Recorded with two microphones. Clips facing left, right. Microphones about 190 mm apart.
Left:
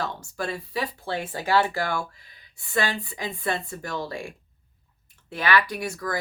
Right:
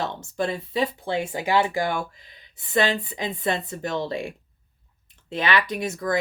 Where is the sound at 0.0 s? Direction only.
20° right (ahead or behind).